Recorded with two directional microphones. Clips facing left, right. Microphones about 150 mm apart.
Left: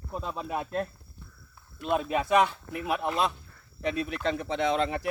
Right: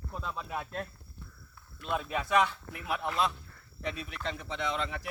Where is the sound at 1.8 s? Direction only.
20° left (ahead or behind).